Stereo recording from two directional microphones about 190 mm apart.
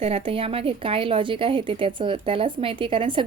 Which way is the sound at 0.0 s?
30° right (ahead or behind).